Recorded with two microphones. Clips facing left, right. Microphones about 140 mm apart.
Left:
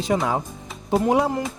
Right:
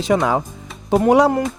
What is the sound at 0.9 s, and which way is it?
Speech, 70° right (ahead or behind).